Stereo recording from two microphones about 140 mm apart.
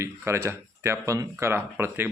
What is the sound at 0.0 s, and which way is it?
Speech, 20° right (ahead or behind).